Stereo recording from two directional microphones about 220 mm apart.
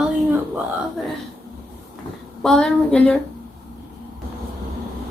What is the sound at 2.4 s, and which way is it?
Speech, 5° left (ahead or behind).